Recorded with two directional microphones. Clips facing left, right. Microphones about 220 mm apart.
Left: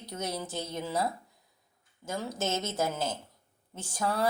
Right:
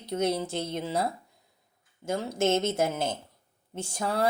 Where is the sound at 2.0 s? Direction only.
25° right (ahead or behind).